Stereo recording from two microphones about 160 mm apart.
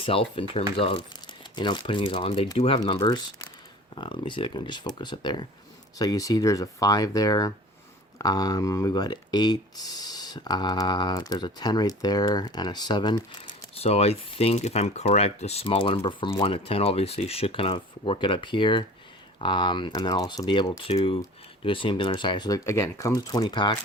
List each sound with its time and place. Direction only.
0.0 s speech: 35° left (ahead or behind)